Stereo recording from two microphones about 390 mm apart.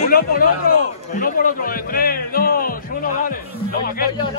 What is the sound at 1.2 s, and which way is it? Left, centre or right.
A man's voice, left.